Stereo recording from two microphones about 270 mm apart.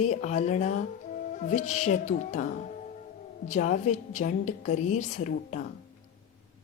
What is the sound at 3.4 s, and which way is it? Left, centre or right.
A woman's voice, left.